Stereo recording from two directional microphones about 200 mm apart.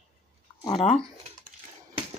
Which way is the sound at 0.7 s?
30° left (ahead or behind).